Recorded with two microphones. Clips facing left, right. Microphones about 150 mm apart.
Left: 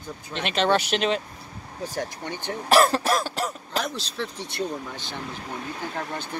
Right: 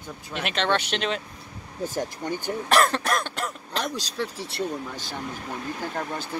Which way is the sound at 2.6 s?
5° left (ahead or behind).